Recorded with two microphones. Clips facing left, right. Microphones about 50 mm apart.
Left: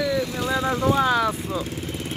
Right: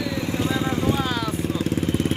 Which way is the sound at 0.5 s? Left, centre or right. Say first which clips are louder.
Left 6 dB; centre.